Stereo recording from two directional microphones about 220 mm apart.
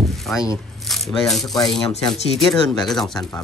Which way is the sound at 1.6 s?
20° left (ahead or behind).